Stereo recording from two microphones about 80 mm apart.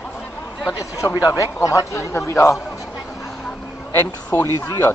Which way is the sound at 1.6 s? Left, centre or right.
Left.